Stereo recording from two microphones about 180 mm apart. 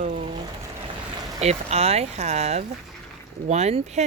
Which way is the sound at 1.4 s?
35° right (ahead or behind).